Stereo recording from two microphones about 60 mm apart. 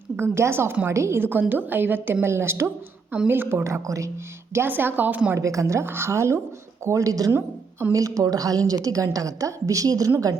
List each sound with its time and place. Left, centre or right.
0.2 s a woman's voice: right
1.2 s a woman's voice: right
3.6 s a woman's voice: right
4.5 s a woman's voice: right
5.4 s a woman's voice: right